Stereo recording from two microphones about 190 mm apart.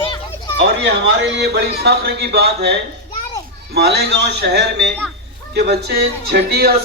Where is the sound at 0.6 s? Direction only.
65° right (ahead or behind).